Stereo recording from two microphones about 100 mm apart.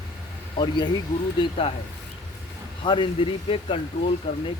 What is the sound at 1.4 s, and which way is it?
Speech, 70° left (ahead or behind).